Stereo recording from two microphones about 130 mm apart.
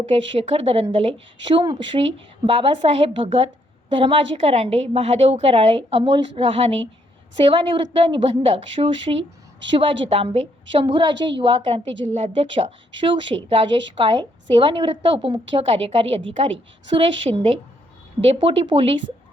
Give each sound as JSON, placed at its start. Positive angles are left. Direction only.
{"t": 0.0, "sound": "a woman's voice", "side_deg": -45}
{"t": 11.6, "sound": "a woman's voice", "side_deg": -50}